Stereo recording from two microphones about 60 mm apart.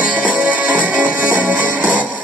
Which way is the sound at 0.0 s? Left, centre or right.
Right.